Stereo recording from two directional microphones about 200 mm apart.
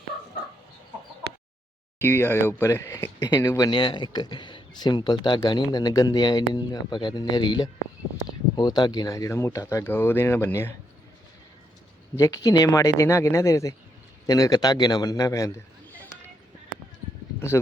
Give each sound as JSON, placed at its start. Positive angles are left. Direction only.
{"t": 2.0, "sound": "speech", "side_deg": 10}
{"t": 12.2, "sound": "a man's voice", "side_deg": 15}